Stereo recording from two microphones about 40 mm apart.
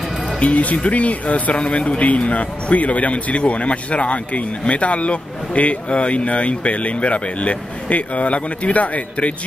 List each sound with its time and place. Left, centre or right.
0.4 s speech: left